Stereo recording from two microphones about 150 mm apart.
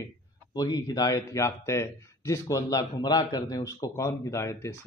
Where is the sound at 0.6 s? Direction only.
25° left (ahead or behind).